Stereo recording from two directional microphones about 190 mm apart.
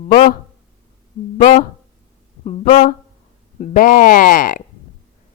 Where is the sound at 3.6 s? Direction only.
45° left (ahead or behind).